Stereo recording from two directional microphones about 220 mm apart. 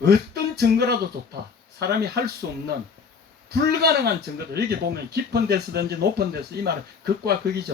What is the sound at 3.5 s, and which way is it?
Speech, 45° right (ahead or behind).